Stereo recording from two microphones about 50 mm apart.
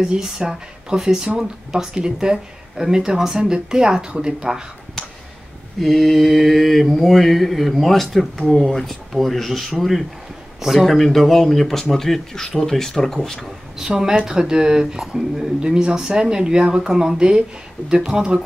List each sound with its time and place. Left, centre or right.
0.0 s speech: centre
5.8 s mantra: centre
11.8 s speech: centre
13.7 s speech: centre